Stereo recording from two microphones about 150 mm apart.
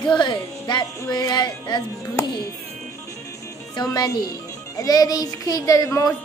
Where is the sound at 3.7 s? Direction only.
25° left (ahead or behind).